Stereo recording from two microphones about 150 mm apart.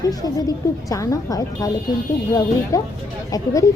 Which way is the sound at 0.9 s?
20° left (ahead or behind).